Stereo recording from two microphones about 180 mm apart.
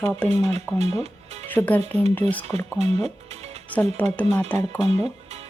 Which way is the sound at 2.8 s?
35° right (ahead or behind).